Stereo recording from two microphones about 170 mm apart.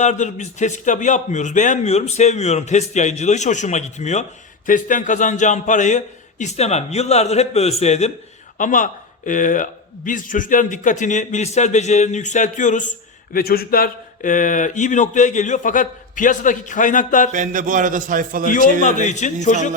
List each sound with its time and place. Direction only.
0.0 s a man's voice: 45° left (ahead or behind)
8.5 s a man's voice: 50° left (ahead or behind)
13.3 s a man's voice: 60° left (ahead or behind)
17.3 s music: 50° right (ahead or behind)
18.4 s a man's voice: 50° left (ahead or behind)